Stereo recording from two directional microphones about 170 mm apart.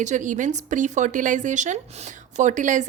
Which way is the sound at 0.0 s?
45° right (ahead or behind).